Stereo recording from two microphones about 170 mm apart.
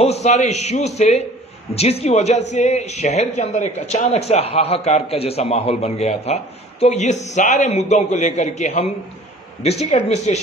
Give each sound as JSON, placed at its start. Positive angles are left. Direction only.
{"t": 0.0, "sound": "speech", "side_deg": 40}